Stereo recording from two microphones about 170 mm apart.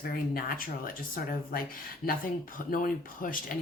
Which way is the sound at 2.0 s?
60° left (ahead or behind).